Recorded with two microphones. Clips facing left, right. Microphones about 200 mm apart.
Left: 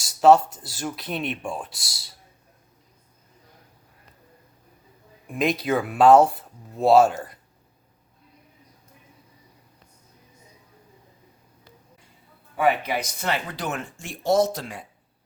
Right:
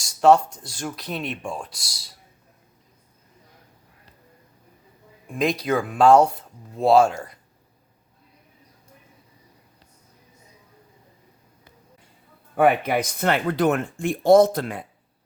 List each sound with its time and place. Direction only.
0.0 s speech: 5° left (ahead or behind)
5.3 s speech: centre (ahead or behind)
12.5 s speech: 55° right (ahead or behind)